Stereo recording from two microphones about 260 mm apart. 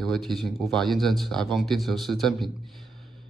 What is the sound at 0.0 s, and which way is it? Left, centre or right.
Speech, centre.